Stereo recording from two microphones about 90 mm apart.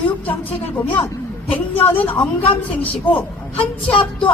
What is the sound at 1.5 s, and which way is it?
A woman's voice, 90° left.